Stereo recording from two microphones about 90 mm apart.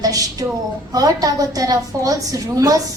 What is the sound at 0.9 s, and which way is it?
A woman's voice, 45° right (ahead or behind).